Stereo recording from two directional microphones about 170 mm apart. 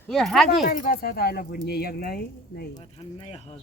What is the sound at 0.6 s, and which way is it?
Speech, 55° left (ahead or behind).